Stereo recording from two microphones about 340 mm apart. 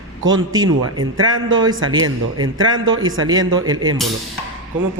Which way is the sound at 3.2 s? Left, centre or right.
Centre.